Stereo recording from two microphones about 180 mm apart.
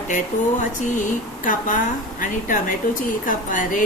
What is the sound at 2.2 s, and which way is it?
Speech, 50° left (ahead or behind).